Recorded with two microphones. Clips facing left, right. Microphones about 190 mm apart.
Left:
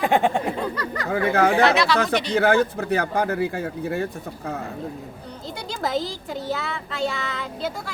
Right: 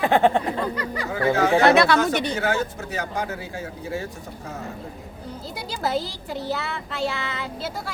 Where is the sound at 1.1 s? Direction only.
60° left (ahead or behind).